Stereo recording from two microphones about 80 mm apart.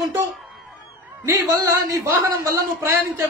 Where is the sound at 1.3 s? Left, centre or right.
Right.